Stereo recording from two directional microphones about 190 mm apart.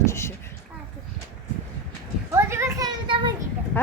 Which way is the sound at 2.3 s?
15° right (ahead or behind).